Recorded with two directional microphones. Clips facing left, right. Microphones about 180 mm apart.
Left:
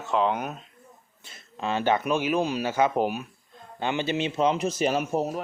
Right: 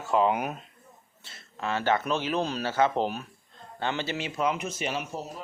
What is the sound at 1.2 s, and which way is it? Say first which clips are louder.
Speech: left 2 dB; 20° left (ahead or behind).